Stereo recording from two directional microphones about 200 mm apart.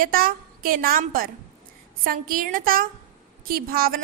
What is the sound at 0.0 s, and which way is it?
A woman's voice, 45° right (ahead or behind).